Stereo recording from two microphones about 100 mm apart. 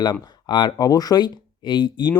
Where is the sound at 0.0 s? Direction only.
45° left (ahead or behind).